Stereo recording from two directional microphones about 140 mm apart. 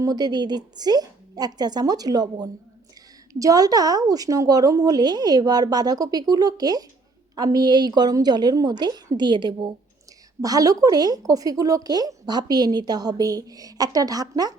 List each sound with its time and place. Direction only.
0.0 s speech: 30° right (ahead or behind)